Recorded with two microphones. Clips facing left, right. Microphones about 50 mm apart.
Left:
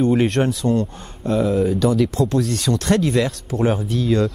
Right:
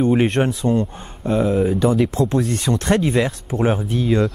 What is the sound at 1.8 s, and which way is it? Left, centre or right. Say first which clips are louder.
Speech: right 1 dB; right.